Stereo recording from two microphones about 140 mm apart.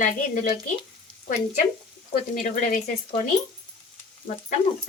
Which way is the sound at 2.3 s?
60° left (ahead or behind).